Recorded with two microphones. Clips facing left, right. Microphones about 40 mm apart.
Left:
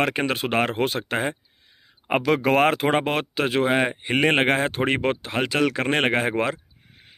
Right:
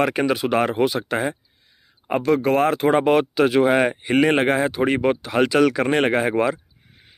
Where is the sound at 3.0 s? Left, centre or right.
Left.